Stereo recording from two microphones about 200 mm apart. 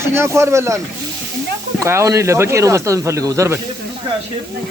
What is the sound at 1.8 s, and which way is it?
Speech, 15° right (ahead or behind).